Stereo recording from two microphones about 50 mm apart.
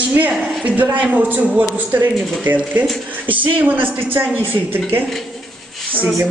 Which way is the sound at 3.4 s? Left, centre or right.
Right.